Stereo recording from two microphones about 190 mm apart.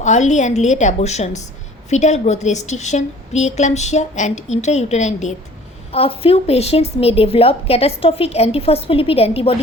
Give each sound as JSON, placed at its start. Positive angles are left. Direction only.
{"t": 0.0, "sound": "a woman's voice", "side_deg": 40}